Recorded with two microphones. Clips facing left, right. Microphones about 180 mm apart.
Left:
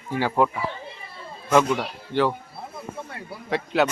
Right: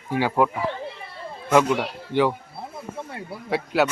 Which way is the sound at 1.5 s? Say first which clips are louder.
Right 1 dB; 10° right (ahead or behind).